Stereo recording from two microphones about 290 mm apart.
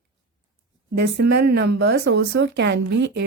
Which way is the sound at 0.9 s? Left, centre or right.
Right.